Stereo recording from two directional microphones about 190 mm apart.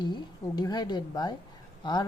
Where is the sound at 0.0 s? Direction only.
20° left (ahead or behind).